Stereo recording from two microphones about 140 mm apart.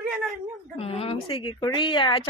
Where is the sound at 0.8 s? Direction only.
45° left (ahead or behind).